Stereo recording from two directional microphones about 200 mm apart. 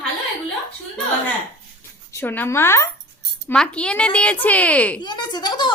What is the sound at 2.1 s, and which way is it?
A woman's voice, 10° left (ahead or behind).